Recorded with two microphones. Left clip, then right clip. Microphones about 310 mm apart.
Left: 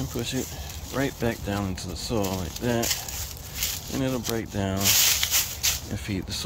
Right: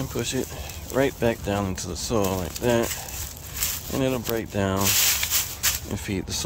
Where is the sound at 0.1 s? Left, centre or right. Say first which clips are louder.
Right 4 dB; centre.